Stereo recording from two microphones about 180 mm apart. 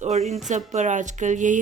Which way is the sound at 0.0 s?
40° right (ahead or behind).